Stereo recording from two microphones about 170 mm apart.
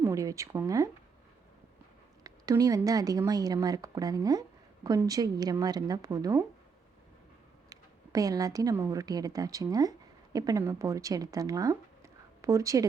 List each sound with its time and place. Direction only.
0.0 s speech: 20° right (ahead or behind)
2.2 s a woman's voice: 20° right (ahead or behind)
7.7 s speech: 20° right (ahead or behind)